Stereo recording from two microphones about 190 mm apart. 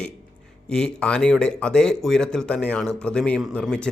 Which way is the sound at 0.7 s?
5° left (ahead or behind).